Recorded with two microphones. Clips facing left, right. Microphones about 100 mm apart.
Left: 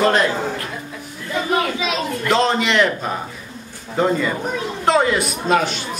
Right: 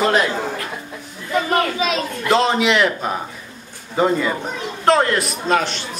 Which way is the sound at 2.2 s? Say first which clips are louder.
Right 2 dB; centre (ahead or behind).